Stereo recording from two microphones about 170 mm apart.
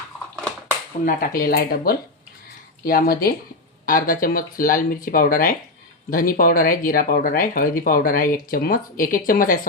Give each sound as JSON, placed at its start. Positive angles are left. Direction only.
{"t": 1.0, "sound": "speech", "side_deg": 55}